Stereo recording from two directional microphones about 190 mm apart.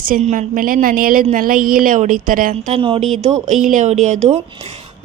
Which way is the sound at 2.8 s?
25° right (ahead or behind).